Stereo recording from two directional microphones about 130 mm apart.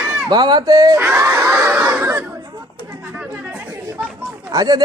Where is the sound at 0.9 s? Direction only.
20° right (ahead or behind).